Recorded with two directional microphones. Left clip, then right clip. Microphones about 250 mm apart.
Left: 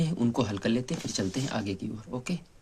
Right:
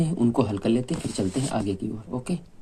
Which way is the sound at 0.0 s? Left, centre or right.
Left.